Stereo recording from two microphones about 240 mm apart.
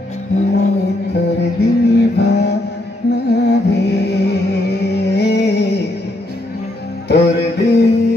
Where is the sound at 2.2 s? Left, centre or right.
Left.